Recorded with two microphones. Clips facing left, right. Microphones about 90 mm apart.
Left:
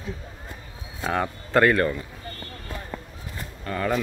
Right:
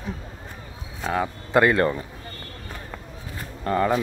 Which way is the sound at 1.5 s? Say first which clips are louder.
Right 1 dB; 20° right (ahead or behind).